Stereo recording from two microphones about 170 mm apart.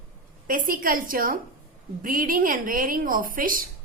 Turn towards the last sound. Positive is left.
turn(degrees=-55)  # may be behind; listen again after turning